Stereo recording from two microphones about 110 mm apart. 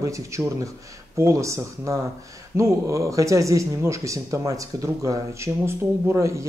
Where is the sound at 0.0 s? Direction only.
30° right (ahead or behind).